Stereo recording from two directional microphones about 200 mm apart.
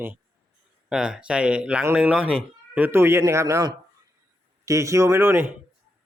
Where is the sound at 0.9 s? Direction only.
5° right (ahead or behind).